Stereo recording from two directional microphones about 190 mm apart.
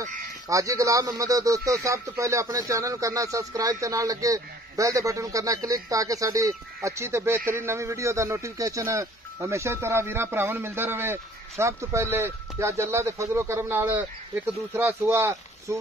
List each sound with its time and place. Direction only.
0.5 s speech: 15° right (ahead or behind)